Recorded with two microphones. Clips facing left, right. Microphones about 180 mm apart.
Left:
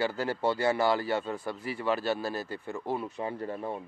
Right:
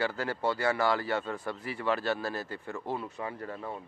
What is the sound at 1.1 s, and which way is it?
A man's voice, 10° left (ahead or behind).